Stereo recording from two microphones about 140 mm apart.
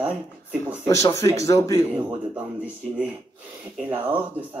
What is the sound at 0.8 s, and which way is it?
Speech, 20° left (ahead or behind).